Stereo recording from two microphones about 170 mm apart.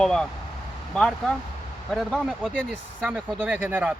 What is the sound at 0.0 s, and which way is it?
Speech, 5° left (ahead or behind).